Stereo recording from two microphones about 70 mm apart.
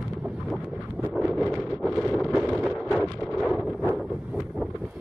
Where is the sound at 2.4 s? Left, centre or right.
Centre.